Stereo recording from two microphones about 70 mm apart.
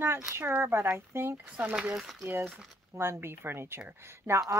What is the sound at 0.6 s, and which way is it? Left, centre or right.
Speech, right.